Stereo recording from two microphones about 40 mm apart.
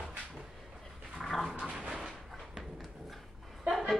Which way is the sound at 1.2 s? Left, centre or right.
Centre.